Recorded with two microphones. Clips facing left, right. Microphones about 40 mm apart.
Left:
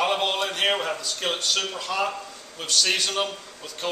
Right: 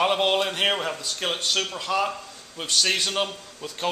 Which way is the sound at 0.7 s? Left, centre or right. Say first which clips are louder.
Left 1 dB; centre.